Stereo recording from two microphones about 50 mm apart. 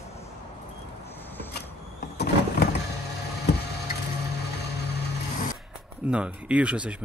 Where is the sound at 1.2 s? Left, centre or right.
Left.